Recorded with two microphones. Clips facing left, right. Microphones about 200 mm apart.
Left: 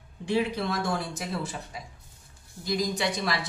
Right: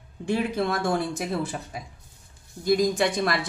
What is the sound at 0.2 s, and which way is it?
Speech, 50° right (ahead or behind).